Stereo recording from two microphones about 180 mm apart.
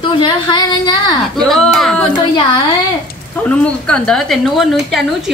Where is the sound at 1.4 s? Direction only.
Centre (ahead or behind).